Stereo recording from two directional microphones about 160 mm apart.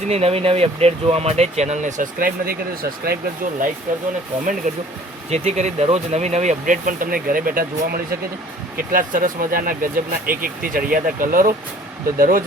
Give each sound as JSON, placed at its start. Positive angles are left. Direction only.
{"t": 0.1, "sound": "speech", "side_deg": -40}
{"t": 3.9, "sound": "speech", "side_deg": -55}